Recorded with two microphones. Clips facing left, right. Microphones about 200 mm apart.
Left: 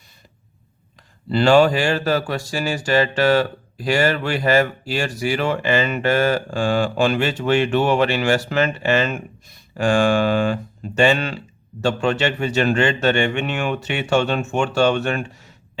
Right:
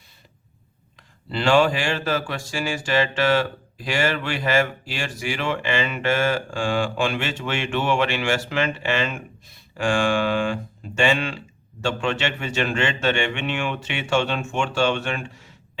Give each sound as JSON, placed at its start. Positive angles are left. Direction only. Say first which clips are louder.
{"t": 1.3, "sound": "speech", "louder": "left 4 dB", "side_deg": 40}